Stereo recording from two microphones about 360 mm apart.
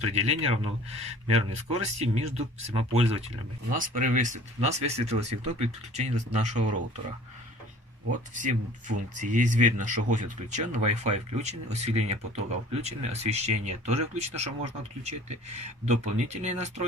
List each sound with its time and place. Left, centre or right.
0.0 s speech: centre
8.4 s speech: right